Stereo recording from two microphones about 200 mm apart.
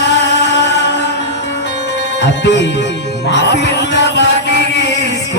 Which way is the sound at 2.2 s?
60° left (ahead or behind).